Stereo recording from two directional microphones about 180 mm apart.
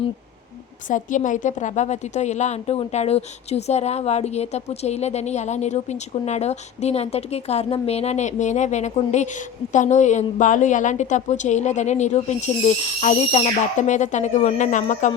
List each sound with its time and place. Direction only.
0.9 s a woman's voice: 45° left (ahead or behind)